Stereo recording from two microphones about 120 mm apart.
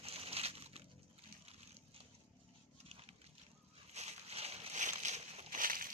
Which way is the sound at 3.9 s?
65° right (ahead or behind).